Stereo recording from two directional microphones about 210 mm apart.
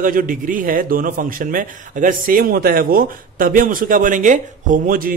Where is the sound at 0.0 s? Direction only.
40° right (ahead or behind).